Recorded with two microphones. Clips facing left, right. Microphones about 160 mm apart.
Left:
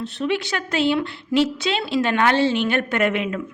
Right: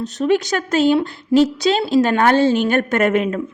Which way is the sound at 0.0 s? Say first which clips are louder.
Right 6 dB; 40° right (ahead or behind).